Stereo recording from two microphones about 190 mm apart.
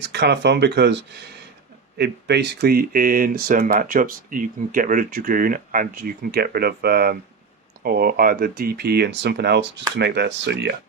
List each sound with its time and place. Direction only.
0.0 s speech: 65° right (ahead or behind)